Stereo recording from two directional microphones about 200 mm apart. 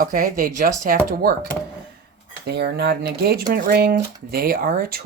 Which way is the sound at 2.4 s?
55° right (ahead or behind).